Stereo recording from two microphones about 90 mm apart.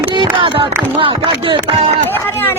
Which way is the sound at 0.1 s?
65° right (ahead or behind).